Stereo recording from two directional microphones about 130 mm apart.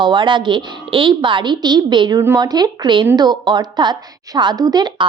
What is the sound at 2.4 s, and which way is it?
A woman's voice, 30° right (ahead or behind).